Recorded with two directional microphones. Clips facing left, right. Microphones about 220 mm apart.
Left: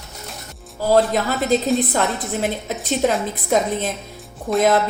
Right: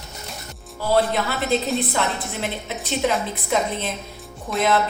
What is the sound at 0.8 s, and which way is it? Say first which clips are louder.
A woman's voice: left 4 dB; 40° left (ahead or behind).